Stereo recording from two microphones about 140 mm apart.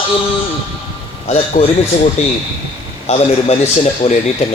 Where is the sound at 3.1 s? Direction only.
50° left (ahead or behind).